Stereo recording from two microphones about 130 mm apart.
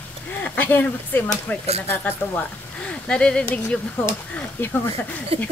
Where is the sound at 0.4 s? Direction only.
15° left (ahead or behind).